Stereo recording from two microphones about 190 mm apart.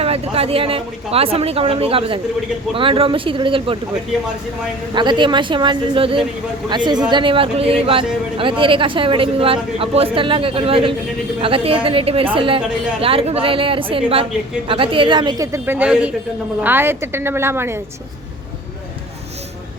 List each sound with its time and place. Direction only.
0.0 s speech: 30° right (ahead or behind)
4.9 s a woman's voice: 25° right (ahead or behind)